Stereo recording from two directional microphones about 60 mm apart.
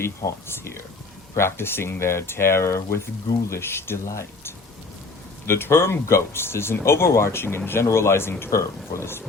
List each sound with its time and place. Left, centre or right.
0.4 s speech: left
8.4 s speech: left